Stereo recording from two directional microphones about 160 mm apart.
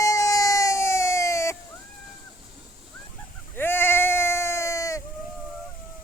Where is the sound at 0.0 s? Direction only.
20° left (ahead or behind).